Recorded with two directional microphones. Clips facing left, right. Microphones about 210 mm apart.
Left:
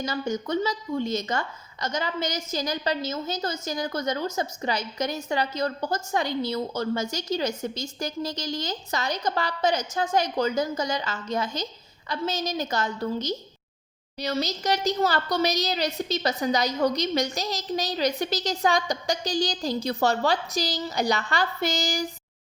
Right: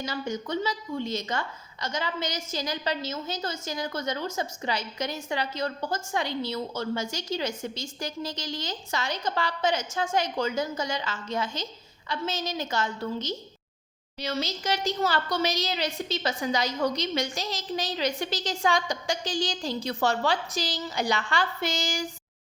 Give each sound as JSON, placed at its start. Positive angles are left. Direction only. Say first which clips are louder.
{"t": 0.0, "sound": "a woman's voice", "louder": "left 3 dB", "side_deg": 45}